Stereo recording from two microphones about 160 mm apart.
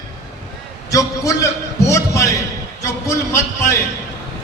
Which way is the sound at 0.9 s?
20° left (ahead or behind).